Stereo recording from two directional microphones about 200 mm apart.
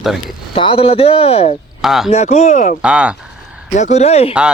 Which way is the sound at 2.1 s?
35° left (ahead or behind).